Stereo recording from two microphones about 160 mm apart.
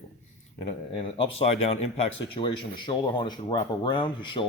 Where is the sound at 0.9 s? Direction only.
35° left (ahead or behind).